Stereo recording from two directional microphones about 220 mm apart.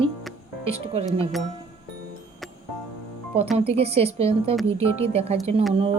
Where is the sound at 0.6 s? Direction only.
25° right (ahead or behind).